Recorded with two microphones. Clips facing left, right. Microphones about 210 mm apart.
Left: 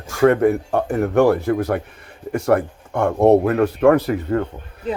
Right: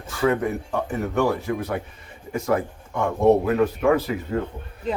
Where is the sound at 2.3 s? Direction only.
65° left (ahead or behind).